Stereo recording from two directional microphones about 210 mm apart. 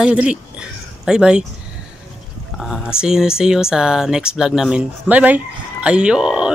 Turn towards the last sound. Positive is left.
turn(degrees=-5)  # may be behind; listen again after turning